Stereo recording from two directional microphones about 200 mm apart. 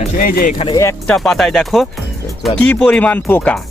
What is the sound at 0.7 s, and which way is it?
Speech, 15° left (ahead or behind).